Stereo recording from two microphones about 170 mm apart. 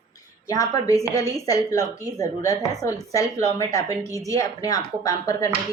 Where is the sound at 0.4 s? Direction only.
20° left (ahead or behind).